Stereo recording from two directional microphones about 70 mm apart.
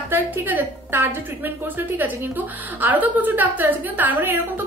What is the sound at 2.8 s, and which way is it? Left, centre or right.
A woman's voice, right.